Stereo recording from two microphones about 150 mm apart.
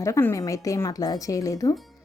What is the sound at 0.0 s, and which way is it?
Speech, 15° left (ahead or behind).